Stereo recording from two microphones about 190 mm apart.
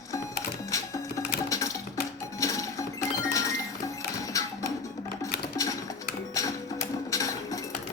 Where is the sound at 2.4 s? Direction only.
15° left (ahead or behind).